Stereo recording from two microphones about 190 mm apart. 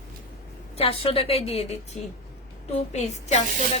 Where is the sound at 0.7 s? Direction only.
30° left (ahead or behind).